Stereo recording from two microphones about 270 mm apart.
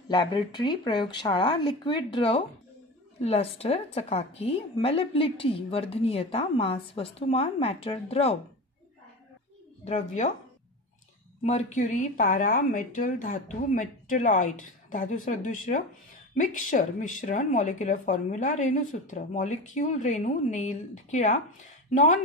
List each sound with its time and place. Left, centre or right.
0.1 s speech: centre
9.8 s speech: left
11.4 s speech: left